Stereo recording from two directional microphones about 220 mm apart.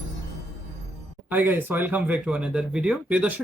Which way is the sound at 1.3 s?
10° right (ahead or behind).